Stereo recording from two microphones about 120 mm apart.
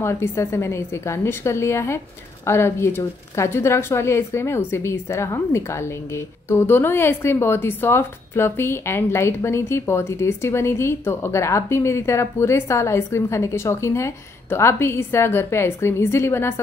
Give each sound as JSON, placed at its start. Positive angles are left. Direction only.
{"t": 0.0, "sound": "a woman's voice", "side_deg": 20}